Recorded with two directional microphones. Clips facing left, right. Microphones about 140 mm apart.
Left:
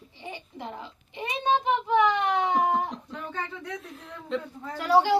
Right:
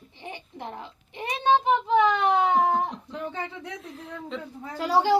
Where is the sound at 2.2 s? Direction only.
25° right (ahead or behind).